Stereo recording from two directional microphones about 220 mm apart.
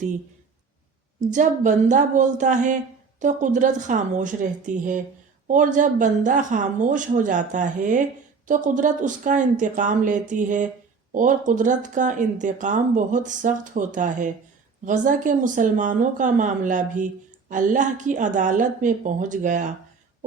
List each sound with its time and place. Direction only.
1.3 s speech: 35° right (ahead or behind)